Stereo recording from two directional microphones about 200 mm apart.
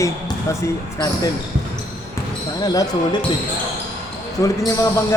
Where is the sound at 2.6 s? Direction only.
20° left (ahead or behind).